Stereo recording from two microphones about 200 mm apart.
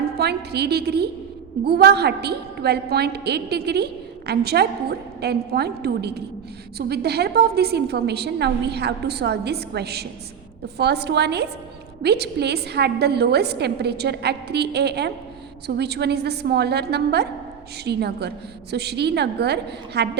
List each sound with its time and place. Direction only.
0.2 s a woman's voice: 55° right (ahead or behind)